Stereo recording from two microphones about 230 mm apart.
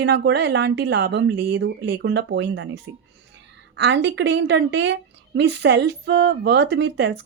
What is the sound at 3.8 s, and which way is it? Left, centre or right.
Speech, right.